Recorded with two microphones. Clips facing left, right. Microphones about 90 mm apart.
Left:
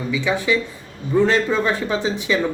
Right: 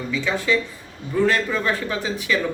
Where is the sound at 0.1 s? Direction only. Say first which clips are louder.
Left 2 dB; 15° left (ahead or behind).